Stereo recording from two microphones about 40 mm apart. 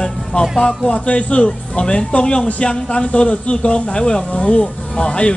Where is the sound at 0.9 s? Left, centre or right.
Left.